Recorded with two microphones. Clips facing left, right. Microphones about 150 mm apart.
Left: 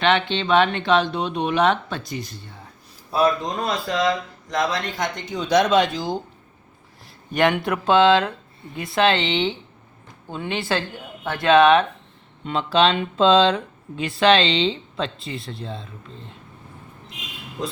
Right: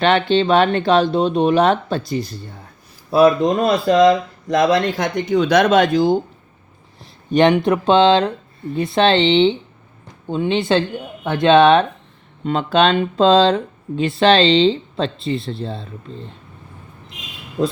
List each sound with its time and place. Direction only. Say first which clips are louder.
0.0 s speech: right 6 dB; 40° right (ahead or behind)
3.2 s speech: right 8 dB; 65° right (ahead or behind)
7.0 s a sound: right 6 dB; 25° right (ahead or behind)
7.7 s speech: right 3 dB; 25° right (ahead or behind)
12.5 s speech: right 3 dB; 45° right (ahead or behind)